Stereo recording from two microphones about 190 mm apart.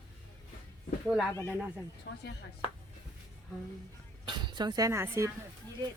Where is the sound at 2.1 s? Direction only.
65° left (ahead or behind).